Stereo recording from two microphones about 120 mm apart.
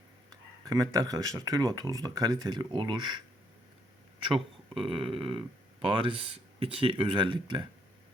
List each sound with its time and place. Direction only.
0.6 s speech: 30° right (ahead or behind)
4.4 s speech: 50° right (ahead or behind)